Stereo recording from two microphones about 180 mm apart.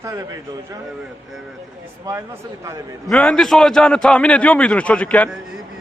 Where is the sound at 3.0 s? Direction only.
5° left (ahead or behind).